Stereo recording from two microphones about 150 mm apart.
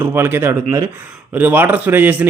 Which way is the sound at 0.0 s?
15° right (ahead or behind).